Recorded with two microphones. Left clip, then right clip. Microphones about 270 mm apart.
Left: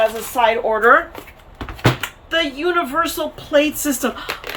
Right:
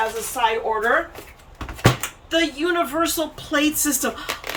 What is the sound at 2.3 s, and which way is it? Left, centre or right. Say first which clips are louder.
Speech: left 2 dB; centre.